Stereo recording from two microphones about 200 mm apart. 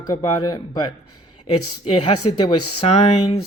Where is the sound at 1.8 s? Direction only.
30° left (ahead or behind).